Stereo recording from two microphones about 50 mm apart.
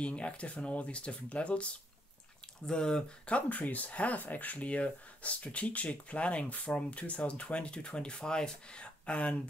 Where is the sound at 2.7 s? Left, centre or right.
Centre.